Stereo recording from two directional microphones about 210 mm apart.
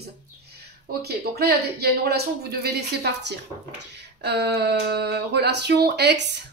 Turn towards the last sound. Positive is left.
turn(degrees=-55)  # may be behind; listen again after turning